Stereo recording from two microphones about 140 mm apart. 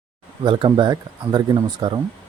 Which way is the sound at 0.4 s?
35° right (ahead or behind).